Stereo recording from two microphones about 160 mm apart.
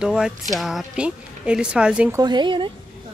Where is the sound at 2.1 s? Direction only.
25° right (ahead or behind).